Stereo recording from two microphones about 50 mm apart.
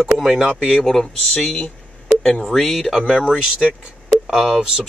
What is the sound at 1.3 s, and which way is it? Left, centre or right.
Speech, left.